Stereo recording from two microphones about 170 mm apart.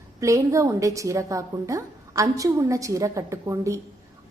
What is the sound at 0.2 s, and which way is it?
A woman's voice, 20° right (ahead or behind).